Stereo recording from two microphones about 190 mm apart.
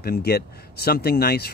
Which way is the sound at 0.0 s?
55° left (ahead or behind).